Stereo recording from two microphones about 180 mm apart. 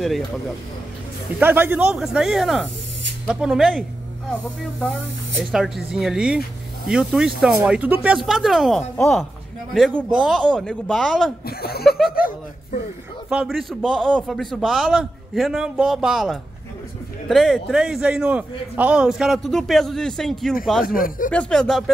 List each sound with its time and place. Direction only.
1.4 s a man's voice: 10° right (ahead or behind)
11.4 s a sound: 60° left (ahead or behind)
13.3 s a man's voice: 5° right (ahead or behind)
20.8 s speech: 50° left (ahead or behind)
21.3 s a man's voice: 5° left (ahead or behind)